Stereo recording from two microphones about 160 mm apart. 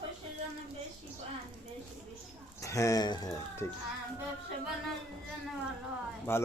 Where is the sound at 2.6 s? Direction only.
20° left (ahead or behind).